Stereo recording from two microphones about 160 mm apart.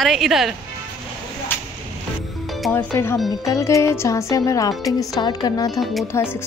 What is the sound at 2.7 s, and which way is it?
A woman's voice, 15° left (ahead or behind).